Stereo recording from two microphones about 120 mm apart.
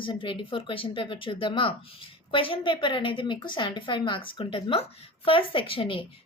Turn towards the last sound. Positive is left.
turn(degrees=45)  # may be behind; listen again after turning